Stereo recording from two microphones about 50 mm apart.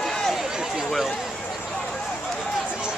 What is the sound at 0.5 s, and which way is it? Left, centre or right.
Speech, centre.